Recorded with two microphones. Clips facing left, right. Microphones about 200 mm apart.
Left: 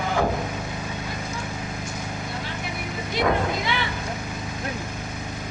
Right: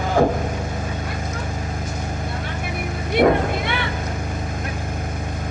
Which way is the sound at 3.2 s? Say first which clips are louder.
Right 7 dB; 55° right (ahead or behind).